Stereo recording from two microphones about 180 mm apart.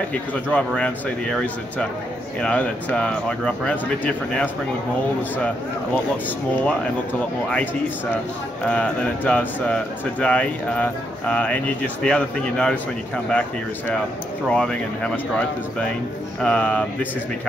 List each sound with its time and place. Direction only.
0.1 s speech: 10° left (ahead or behind)
8.6 s speech: 5° left (ahead or behind)
14.5 s speech: 5° left (ahead or behind)